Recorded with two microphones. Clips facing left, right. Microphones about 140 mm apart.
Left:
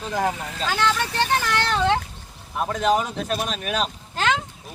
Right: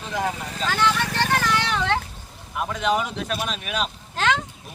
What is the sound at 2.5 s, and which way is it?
Speech, 40° left (ahead or behind).